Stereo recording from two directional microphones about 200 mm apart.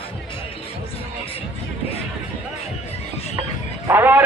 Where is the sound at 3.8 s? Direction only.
10° right (ahead or behind).